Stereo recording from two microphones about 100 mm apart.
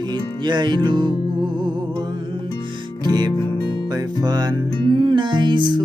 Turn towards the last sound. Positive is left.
turn(degrees=-50)  # may be behind; listen again after turning